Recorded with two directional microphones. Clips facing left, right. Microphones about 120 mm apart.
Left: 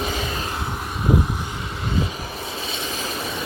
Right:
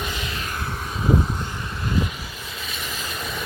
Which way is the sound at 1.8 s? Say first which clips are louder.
Even; 25° left (ahead or behind).